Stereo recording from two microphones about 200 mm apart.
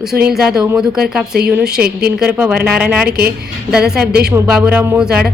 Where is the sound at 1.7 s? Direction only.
50° right (ahead or behind).